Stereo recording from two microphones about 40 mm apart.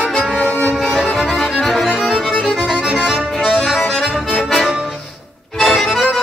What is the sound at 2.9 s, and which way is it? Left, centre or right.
Music, right.